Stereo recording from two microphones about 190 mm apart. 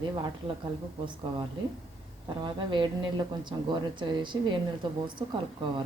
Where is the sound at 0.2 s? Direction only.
25° right (ahead or behind).